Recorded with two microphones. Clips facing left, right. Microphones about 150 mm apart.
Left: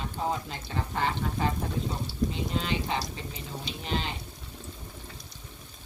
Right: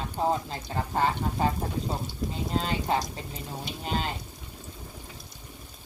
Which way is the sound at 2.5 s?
40° right (ahead or behind).